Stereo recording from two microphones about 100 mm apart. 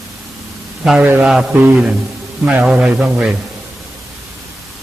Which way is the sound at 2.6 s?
10° right (ahead or behind).